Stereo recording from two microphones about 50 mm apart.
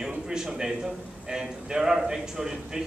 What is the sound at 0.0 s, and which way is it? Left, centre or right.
A man's voice, centre.